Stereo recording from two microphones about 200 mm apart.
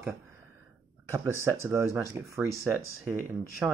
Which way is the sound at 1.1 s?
15° right (ahead or behind).